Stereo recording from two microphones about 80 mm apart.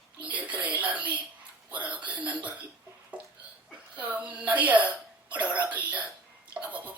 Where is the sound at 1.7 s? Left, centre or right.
Centre.